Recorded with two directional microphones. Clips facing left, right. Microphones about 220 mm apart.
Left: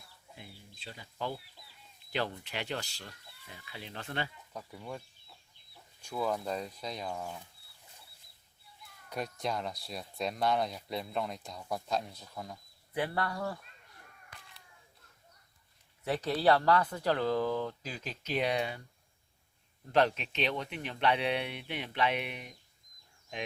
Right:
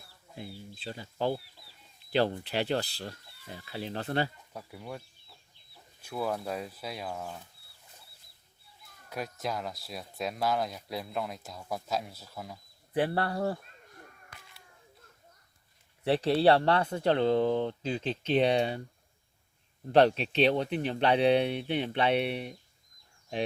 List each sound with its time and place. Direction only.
0.3 s speech: 35° right (ahead or behind)
4.5 s speech: 10° right (ahead or behind)
9.0 s speech: 5° right (ahead or behind)
12.9 s speech: 30° right (ahead or behind)
16.0 s speech: 30° right (ahead or behind)
19.9 s speech: 35° right (ahead or behind)